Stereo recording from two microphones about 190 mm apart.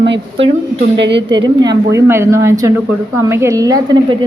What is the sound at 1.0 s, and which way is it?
Speech, 70° right (ahead or behind).